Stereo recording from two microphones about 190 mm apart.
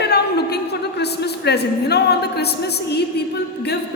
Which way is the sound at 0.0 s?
60° left (ahead or behind).